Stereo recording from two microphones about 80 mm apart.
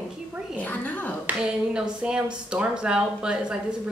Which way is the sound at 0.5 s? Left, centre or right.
Left.